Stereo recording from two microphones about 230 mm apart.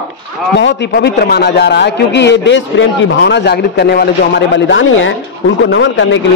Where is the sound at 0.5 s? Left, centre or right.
Left.